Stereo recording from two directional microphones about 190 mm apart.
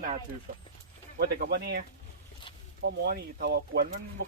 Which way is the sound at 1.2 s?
55° right (ahead or behind).